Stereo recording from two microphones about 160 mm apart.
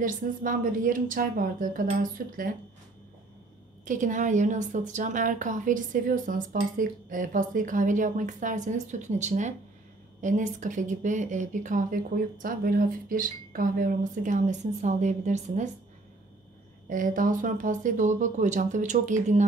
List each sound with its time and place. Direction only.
0.0 s a woman's voice: 60° right (ahead or behind)
3.8 s a woman's voice: 55° right (ahead or behind)
16.9 s a woman's voice: 55° right (ahead or behind)